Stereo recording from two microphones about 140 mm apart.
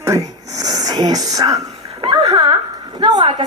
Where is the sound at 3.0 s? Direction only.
30° right (ahead or behind).